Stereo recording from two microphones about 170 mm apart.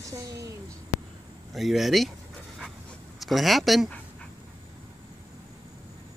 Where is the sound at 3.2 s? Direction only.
Centre (ahead or behind).